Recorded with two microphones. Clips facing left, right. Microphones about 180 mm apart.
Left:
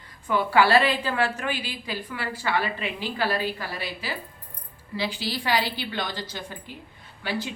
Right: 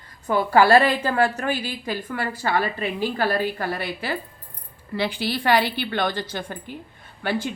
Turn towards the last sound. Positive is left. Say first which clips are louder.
# right 5 dB
turn(degrees=-55)  # may be behind; listen again after turning